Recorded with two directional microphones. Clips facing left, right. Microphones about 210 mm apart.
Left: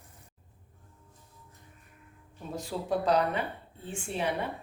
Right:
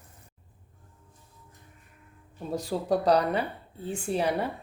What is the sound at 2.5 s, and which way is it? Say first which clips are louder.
Speech: right 4 dB; 40° right (ahead or behind).